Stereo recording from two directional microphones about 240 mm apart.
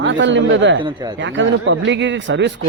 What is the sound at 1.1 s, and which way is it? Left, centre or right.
Speech, right.